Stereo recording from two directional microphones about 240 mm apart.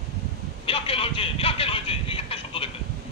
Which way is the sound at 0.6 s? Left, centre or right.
Left.